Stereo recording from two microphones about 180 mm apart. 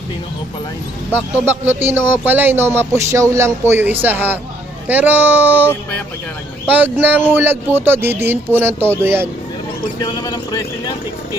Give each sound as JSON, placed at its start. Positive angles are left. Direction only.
{"t": 1.5, "sound": "speech", "side_deg": -10}
{"t": 10.0, "sound": "speech", "side_deg": 20}